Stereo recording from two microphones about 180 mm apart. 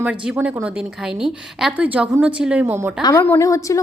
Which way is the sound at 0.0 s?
10° right (ahead or behind).